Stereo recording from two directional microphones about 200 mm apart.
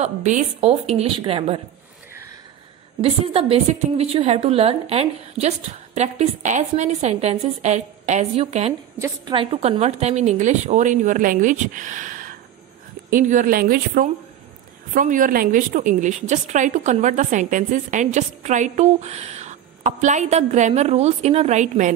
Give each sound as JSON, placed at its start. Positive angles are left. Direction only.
{"t": 0.0, "sound": "a woman's voice", "side_deg": -35}
{"t": 3.0, "sound": "a woman's voice", "side_deg": -30}